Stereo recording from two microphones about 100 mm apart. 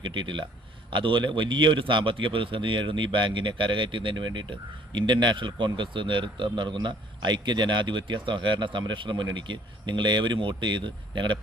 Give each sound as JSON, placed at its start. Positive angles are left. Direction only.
{"t": 0.0, "sound": "a man's voice", "side_deg": -50}